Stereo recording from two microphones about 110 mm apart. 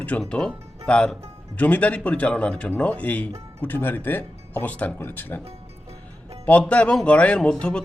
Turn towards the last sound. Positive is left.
turn(degrees=10)  # may be behind; listen again after turning